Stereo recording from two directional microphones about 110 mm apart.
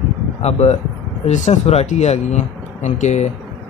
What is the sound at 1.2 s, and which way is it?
Speech, 90° left.